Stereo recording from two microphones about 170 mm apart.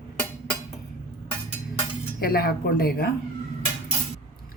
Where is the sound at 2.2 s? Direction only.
65° left (ahead or behind).